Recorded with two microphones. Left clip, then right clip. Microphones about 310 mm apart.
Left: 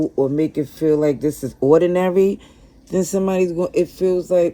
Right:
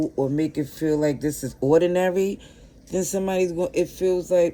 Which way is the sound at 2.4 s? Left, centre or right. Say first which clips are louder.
Left 1 dB; centre.